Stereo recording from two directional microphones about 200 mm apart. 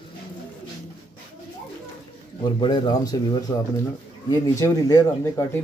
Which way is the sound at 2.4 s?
25° left (ahead or behind).